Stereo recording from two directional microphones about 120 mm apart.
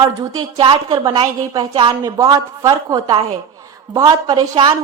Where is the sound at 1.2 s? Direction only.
30° right (ahead or behind).